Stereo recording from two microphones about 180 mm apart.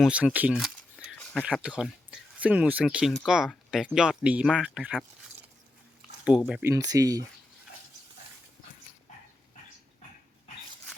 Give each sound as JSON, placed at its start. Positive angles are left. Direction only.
{"t": 0.0, "sound": "speech", "side_deg": -5}
{"t": 1.2, "sound": "a sound", "side_deg": 10}
{"t": 1.5, "sound": "speech", "side_deg": -5}
{"t": 6.2, "sound": "speech", "side_deg": -5}